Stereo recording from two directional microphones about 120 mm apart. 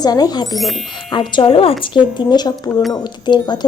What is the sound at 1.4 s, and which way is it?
A woman's voice, 50° left (ahead or behind).